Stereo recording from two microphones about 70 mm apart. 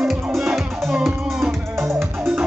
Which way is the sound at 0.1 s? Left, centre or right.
Centre.